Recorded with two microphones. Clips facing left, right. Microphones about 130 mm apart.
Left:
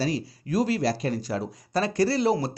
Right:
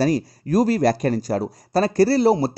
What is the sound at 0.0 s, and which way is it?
Speech, 45° right (ahead or behind).